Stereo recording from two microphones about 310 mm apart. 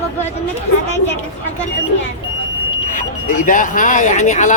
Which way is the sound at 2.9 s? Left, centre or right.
Left.